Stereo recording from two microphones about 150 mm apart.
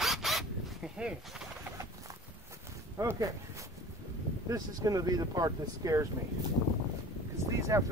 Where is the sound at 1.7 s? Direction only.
20° right (ahead or behind).